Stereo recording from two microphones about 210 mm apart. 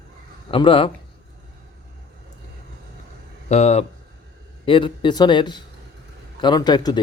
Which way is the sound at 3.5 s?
30° left (ahead or behind).